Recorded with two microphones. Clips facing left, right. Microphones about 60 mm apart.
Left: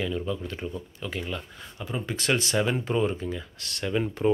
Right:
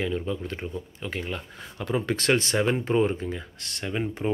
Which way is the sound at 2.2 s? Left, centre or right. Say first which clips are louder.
Even; right.